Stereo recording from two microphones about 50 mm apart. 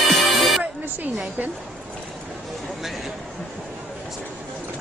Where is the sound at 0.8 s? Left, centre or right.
Right.